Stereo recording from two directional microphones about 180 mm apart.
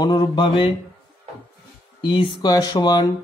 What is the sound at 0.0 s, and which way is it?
Mantra, 25° left (ahead or behind).